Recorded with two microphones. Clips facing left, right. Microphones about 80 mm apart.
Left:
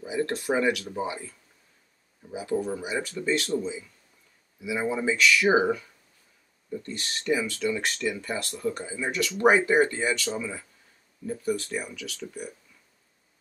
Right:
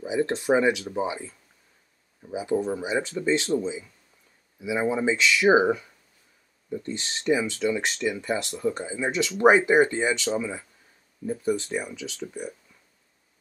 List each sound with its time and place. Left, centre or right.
0.0 s speech: centre